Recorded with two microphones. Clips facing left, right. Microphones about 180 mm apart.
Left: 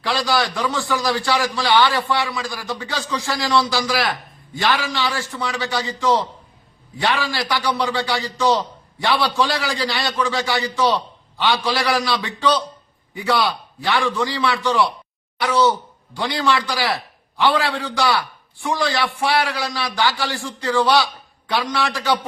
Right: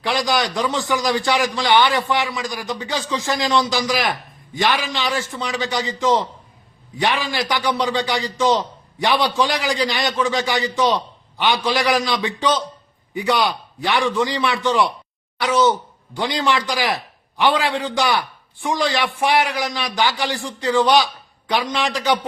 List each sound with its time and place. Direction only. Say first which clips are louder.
0.0 s a man's voice: even; 20° right (ahead or behind)